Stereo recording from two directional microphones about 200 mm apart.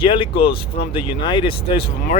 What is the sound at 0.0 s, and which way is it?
Speech, 25° left (ahead or behind).